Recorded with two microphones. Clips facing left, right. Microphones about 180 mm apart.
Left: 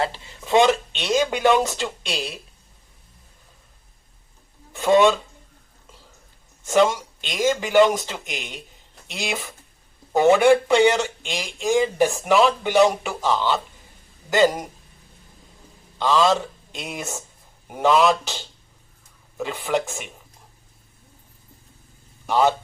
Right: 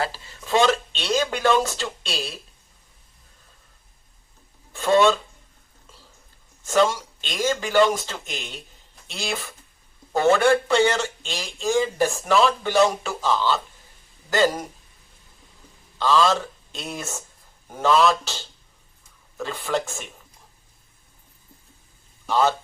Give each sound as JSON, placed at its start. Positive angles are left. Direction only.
{"t": 0.0, "sound": "speech", "side_deg": 20}
{"t": 4.7, "sound": "speech", "side_deg": 15}
{"t": 6.7, "sound": "speech", "side_deg": 20}
{"t": 16.0, "sound": "speech", "side_deg": 15}
{"t": 22.3, "sound": "a man's voice", "side_deg": 15}